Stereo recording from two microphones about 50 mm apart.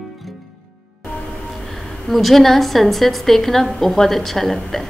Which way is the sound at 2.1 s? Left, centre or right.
Centre.